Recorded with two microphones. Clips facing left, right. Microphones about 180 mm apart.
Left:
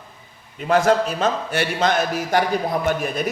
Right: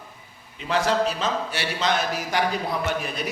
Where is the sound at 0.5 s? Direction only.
50° left (ahead or behind).